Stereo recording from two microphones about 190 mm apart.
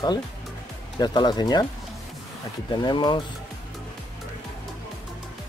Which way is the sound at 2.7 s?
25° left (ahead or behind).